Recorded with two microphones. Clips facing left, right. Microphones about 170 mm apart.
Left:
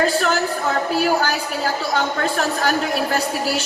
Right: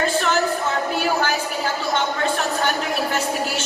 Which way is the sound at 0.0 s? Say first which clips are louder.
Left 1 dB; 35° left (ahead or behind).